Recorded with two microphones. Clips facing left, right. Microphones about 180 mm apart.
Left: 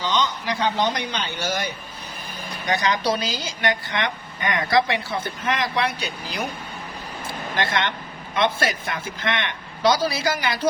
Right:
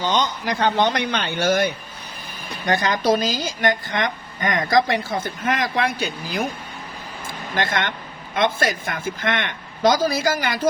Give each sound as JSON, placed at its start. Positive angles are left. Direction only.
{"t": 0.0, "sound": "a woman's voice", "side_deg": -50}
{"t": 7.5, "sound": "a woman's voice", "side_deg": -50}